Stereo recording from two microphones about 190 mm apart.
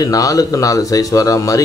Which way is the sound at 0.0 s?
20° left (ahead or behind).